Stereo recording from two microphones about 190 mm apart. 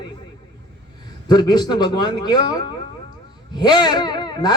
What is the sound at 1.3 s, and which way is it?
A man's voice, 20° left (ahead or behind).